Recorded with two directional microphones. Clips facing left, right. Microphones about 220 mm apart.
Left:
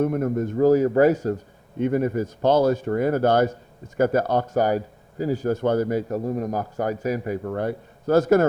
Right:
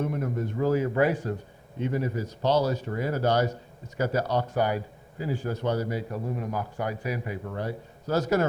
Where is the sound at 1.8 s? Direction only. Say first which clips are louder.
Left 7 dB; 50° left (ahead or behind).